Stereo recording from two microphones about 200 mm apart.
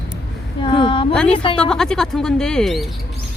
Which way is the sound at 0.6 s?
25° left (ahead or behind).